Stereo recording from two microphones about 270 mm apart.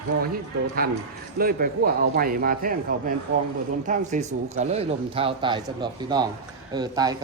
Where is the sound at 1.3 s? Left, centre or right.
Right.